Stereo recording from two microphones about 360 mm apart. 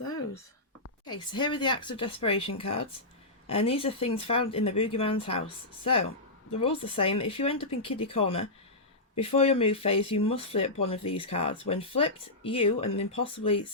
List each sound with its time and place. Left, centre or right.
1.1 s speech: centre